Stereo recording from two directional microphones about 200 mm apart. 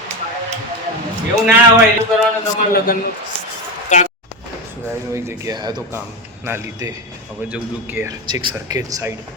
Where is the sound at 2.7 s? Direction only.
50° left (ahead or behind).